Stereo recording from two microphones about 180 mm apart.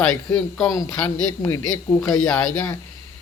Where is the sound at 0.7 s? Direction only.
20° left (ahead or behind); by 2.4 s 5° left (ahead or behind).